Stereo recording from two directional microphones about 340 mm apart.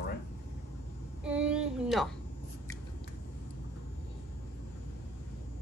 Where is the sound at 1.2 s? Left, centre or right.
Centre.